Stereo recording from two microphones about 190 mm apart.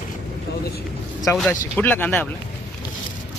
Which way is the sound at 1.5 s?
10° left (ahead or behind).